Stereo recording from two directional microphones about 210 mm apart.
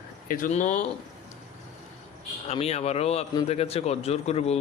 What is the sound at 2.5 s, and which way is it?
A man's voice, 30° left (ahead or behind).